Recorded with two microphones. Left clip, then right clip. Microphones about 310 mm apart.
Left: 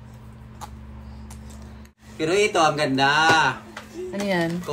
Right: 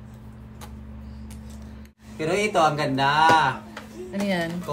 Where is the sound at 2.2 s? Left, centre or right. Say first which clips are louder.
Left 2 dB; centre.